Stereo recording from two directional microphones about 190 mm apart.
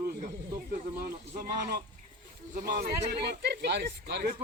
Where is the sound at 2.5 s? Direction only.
50° right (ahead or behind).